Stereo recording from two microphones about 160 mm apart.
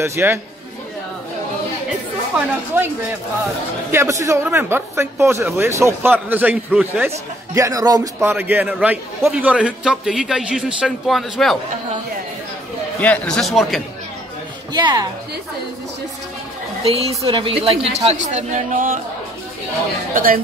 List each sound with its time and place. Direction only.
0.0 s a man's voice: 15° right (ahead or behind)
2.3 s a man's voice: 15° right (ahead or behind)
7.5 s a man's voice: 20° right (ahead or behind); by 11.5 s centre (ahead or behind)
13.0 s speech: 10° left (ahead or behind)
14.7 s speech: 25° right (ahead or behind)
16.8 s speech: 40° right (ahead or behind)
20.2 s speech: 60° right (ahead or behind)